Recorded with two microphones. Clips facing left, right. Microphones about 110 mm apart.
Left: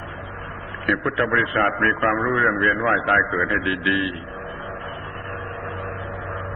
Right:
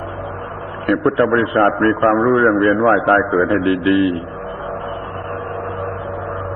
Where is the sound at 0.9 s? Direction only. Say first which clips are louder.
Right 8 dB; 35° right (ahead or behind).